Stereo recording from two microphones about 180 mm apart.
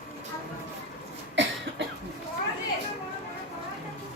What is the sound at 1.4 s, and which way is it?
Cough, 90° right.